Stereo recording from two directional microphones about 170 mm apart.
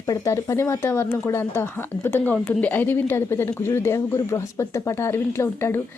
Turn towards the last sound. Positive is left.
turn(degrees=15)  # may be behind; listen again after turning